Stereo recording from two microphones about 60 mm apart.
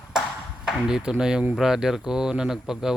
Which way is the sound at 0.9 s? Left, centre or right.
Centre.